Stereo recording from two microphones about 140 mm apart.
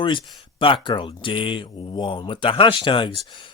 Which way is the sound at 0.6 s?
35° left (ahead or behind).